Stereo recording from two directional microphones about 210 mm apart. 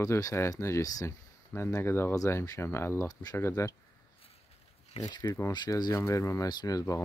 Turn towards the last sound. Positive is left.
turn(degrees=15)  # may be behind; listen again after turning